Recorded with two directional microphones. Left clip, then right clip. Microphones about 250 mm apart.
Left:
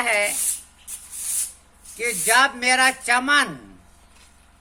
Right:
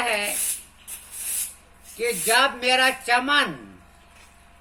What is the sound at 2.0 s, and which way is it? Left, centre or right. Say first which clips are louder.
A man's voice: left 2 dB; left.